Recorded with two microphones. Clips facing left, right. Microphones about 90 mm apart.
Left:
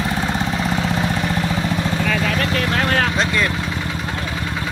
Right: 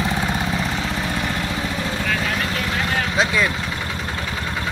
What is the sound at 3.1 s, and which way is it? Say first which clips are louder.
Vehicle: even; 5° right (ahead or behind).